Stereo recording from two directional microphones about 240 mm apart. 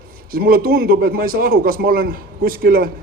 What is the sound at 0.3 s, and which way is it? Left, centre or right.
Speech, right.